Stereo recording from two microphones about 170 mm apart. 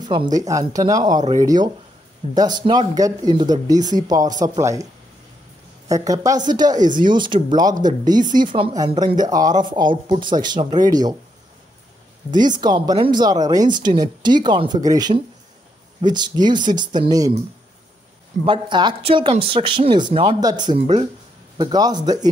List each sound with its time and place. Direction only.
0.0 s speech: 25° right (ahead or behind)
5.9 s speech: 20° right (ahead or behind)
6.8 s speech: 50° right (ahead or behind)
7.1 s speech: 25° right (ahead or behind)
12.4 s speech: 25° right (ahead or behind)
18.4 s speech: 30° right (ahead or behind)